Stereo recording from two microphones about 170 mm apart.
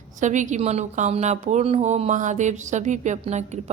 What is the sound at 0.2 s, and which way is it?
Speech, 45° right (ahead or behind).